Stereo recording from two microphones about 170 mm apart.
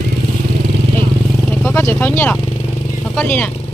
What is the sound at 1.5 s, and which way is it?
Vehicle, 10° left (ahead or behind).